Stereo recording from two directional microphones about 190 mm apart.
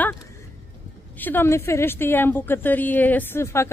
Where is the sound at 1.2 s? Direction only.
10° left (ahead or behind).